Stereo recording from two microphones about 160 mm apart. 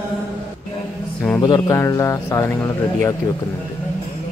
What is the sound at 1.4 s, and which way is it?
Speech, 25° left (ahead or behind).